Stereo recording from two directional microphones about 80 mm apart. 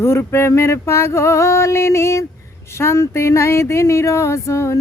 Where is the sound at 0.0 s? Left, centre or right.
Left.